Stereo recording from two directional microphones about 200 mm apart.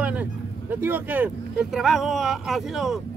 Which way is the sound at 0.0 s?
5° right (ahead or behind).